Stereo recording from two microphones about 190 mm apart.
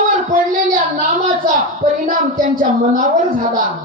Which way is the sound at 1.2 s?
45° right (ahead or behind).